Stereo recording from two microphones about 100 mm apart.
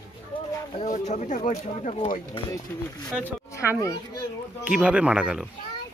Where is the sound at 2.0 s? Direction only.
60° left (ahead or behind).